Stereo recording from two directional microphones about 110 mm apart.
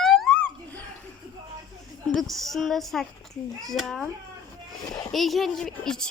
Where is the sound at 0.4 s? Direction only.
15° left (ahead or behind).